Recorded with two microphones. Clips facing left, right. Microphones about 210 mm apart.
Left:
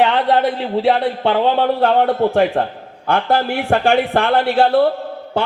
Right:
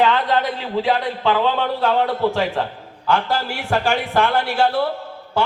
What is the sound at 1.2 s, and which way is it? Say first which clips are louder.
A man's voice: left 3 dB; 55° left (ahead or behind).